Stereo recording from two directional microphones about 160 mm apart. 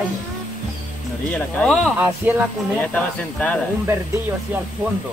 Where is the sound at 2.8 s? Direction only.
10° left (ahead or behind).